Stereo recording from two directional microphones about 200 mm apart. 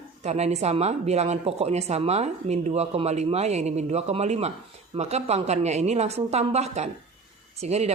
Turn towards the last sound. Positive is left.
turn(degrees=-30)  # may be behind; listen again after turning